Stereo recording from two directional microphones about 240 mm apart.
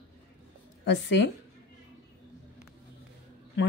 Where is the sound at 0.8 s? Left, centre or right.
Left.